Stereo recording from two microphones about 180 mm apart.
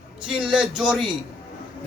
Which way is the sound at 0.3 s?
5° right (ahead or behind).